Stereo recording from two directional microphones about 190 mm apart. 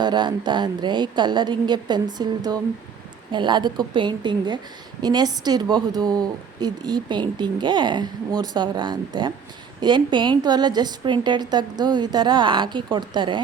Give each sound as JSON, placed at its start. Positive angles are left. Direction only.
{"t": 0.0, "sound": "a woman's voice", "side_deg": -25}